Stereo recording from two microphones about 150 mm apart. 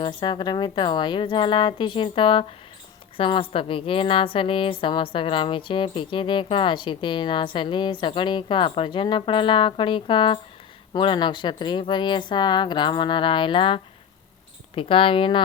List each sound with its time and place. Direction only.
0.0 s a woman's voice: 30° left (ahead or behind)